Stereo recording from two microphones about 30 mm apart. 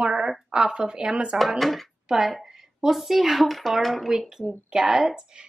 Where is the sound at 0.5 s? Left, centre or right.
Right.